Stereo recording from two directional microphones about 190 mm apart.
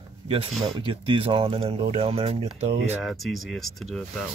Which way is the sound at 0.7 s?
25° right (ahead or behind).